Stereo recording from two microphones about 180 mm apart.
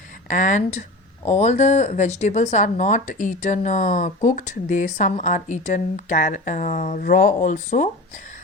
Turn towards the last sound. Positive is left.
turn(degrees=45)  # may be behind; listen again after turning